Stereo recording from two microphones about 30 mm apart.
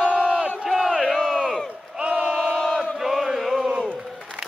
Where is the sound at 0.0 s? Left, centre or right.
Left.